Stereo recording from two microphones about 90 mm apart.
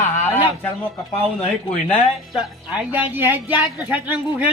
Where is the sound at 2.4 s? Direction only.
15° right (ahead or behind).